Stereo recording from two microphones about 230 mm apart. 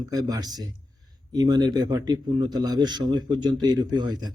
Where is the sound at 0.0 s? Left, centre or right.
Centre.